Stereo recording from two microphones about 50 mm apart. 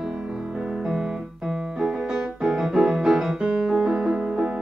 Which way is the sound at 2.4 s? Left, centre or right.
Centre.